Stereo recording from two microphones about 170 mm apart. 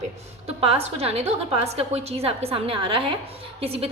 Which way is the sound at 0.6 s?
35° right (ahead or behind).